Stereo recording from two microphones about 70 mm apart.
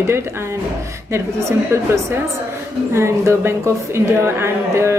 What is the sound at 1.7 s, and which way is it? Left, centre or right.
Speech, right.